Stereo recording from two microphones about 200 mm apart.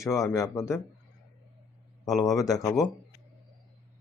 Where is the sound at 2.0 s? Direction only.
15° left (ahead or behind).